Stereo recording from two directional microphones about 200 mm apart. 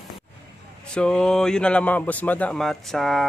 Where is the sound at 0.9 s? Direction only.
5° left (ahead or behind).